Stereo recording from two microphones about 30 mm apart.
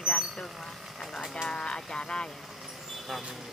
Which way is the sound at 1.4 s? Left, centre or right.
Left.